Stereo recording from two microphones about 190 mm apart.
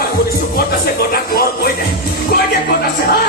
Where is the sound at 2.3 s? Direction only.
55° left (ahead or behind).